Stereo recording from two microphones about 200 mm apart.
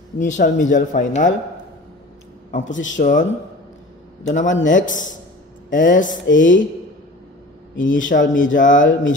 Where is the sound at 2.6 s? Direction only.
70° left (ahead or behind).